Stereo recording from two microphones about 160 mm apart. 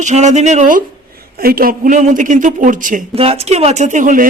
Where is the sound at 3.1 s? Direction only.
40° right (ahead or behind); by 4.2 s 55° right (ahead or behind).